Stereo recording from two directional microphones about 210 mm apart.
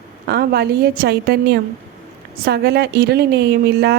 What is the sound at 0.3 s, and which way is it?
A woman's voice, 50° right (ahead or behind).